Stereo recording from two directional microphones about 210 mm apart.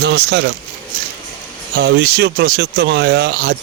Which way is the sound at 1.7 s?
50° right (ahead or behind).